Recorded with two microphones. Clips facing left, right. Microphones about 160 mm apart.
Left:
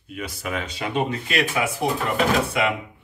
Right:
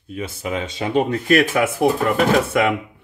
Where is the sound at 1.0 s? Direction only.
50° right (ahead or behind).